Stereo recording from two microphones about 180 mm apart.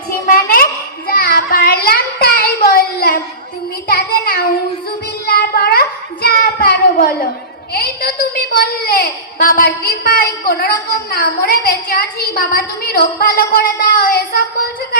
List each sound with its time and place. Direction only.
0.3 s child singing: 55° left (ahead or behind)
7.7 s a sound: 60° left (ahead or behind)
8.7 s a woman's voice: 55° left (ahead or behind)